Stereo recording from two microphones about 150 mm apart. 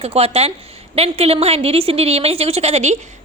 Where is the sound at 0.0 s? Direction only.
40° right (ahead or behind).